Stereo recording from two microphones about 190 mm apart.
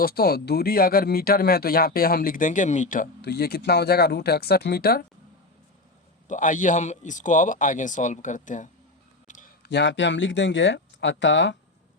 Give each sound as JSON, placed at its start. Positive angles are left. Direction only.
{"t": 0.0, "sound": "speech", "side_deg": 55}
{"t": 3.2, "sound": "speech", "side_deg": 60}
{"t": 6.2, "sound": "a man's voice", "side_deg": 40}
{"t": 9.2, "sound": "a sound", "side_deg": 45}
{"t": 9.6, "sound": "speech", "side_deg": 70}